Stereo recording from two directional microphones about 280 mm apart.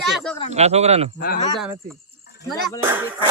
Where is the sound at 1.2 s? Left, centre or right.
Left.